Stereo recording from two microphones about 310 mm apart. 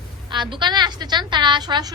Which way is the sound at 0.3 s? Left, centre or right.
Centre.